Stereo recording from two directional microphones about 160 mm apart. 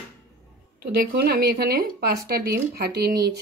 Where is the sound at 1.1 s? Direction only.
90° right.